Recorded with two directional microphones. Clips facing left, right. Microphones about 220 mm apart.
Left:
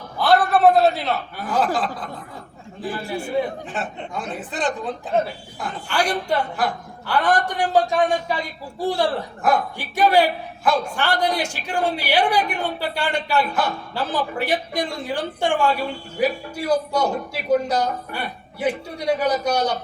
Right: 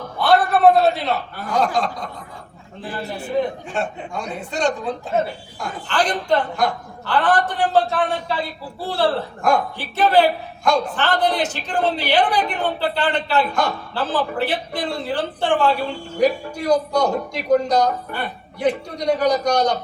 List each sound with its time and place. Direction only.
0.2 s a sound: centre (ahead or behind)
1.4 s speech: 5° left (ahead or behind)
3.1 s a man's voice: 10° left (ahead or behind)